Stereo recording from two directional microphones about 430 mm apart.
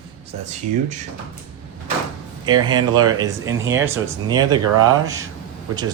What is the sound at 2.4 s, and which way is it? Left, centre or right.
Speech, centre.